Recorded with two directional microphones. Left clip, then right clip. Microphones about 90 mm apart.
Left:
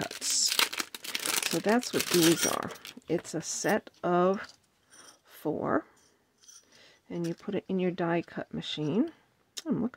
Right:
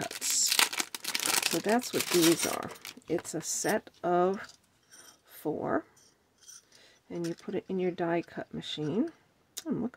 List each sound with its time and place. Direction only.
0.0 s crumpling: 10° right (ahead or behind)
1.8 s speech: 5° right (ahead or behind)
3.3 s speech: 35° left (ahead or behind)
6.7 s a sound: 35° left (ahead or behind)
7.3 s speech: 40° left (ahead or behind)